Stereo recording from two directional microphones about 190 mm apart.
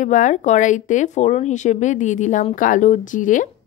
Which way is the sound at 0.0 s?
40° left (ahead or behind).